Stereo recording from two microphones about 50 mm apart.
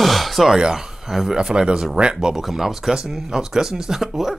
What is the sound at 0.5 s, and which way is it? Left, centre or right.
Speech, centre.